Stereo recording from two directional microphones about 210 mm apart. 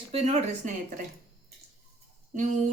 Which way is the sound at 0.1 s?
35° right (ahead or behind).